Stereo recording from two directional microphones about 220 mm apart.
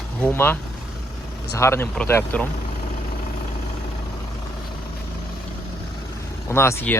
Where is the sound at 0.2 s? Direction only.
10° left (ahead or behind).